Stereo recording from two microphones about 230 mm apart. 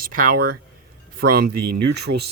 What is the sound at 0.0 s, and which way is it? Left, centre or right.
Speech, right.